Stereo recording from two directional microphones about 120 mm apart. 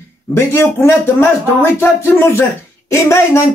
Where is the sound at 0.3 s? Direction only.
20° left (ahead or behind).